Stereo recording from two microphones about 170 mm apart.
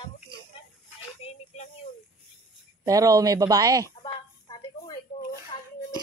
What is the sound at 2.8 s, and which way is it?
Speech, 20° right (ahead or behind).